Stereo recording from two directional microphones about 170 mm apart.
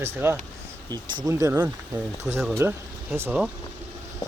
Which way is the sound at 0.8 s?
25° right (ahead or behind).